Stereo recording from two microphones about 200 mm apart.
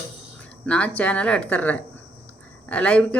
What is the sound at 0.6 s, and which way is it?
Speech, 5° left (ahead or behind).